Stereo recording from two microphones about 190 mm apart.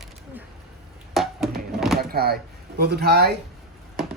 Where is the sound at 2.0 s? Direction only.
55° right (ahead or behind).